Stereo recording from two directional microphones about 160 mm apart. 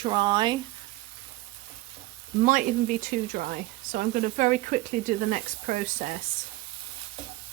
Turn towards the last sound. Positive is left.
turn(degrees=-55)  # may be behind; listen again after turning